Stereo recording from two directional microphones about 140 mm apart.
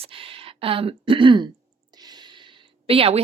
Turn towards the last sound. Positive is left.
turn(degrees=-45)  # may be behind; listen again after turning